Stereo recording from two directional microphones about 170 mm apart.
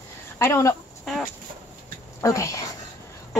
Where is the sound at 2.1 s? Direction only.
20° left (ahead or behind).